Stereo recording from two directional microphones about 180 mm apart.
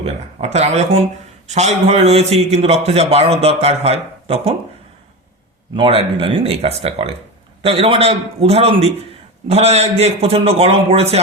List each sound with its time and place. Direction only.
0.5 s a man's voice: 40° right (ahead or behind)
5.7 s a man's voice: 30° right (ahead or behind)